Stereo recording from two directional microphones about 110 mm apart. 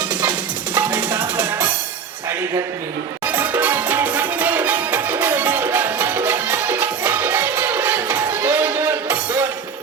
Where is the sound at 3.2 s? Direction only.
15° right (ahead or behind).